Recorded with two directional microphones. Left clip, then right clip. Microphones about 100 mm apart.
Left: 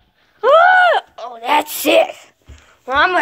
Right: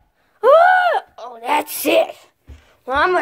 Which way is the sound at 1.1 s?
10° right (ahead or behind).